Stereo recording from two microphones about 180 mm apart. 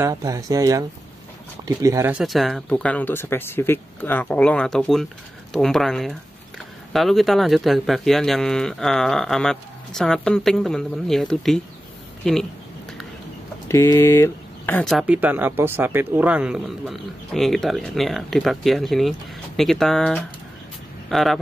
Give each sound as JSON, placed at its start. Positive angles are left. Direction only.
{"t": 0.0, "sound": "speech", "side_deg": -20}
{"t": 2.1, "sound": "speech", "side_deg": 0}
{"t": 13.7, "sound": "speech", "side_deg": 15}